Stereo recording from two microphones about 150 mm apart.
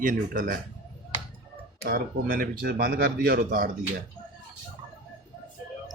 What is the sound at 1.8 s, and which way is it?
Speech, 75° right (ahead or behind).